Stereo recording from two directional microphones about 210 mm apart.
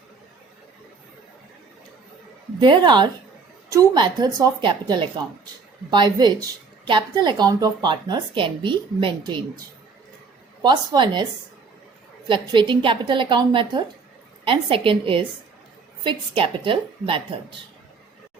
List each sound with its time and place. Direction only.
2.6 s a woman's voice: 20° right (ahead or behind)
10.6 s a woman's voice: 20° right (ahead or behind)
12.3 s a woman's voice: 20° right (ahead or behind)